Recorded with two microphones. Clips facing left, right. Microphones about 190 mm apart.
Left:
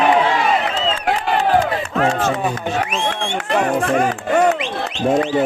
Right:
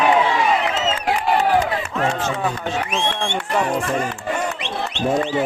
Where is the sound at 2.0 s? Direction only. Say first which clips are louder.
Left 5 dB; 55° left (ahead or behind).